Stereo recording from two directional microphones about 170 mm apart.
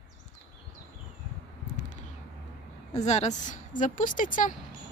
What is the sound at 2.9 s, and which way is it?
Speech, 40° left (ahead or behind).